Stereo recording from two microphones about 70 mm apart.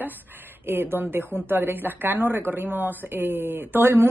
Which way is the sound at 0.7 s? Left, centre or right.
Right.